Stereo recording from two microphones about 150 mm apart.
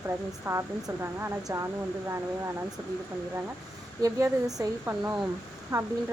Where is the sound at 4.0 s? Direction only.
20° right (ahead or behind).